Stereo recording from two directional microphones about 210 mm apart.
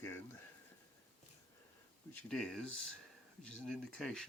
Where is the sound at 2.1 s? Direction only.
5° left (ahead or behind).